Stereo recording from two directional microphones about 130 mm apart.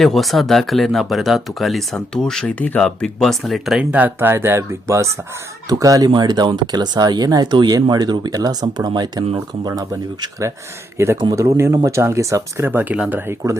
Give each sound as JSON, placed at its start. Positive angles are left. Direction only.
{"t": 0.0, "sound": "speech", "side_deg": 0}